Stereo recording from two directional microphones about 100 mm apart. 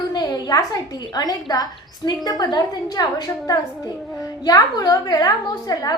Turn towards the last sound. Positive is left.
turn(degrees=40)  # may be behind; listen again after turning